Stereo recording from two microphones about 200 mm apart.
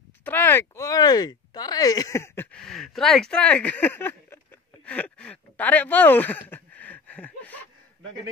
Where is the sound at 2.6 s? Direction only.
Centre (ahead or behind).